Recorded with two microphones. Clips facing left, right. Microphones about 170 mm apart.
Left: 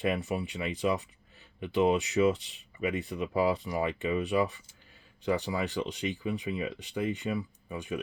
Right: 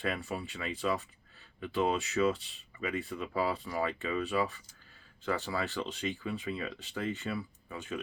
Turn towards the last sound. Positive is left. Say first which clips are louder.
# left 4 dB
turn(degrees=15)  # may be behind; listen again after turning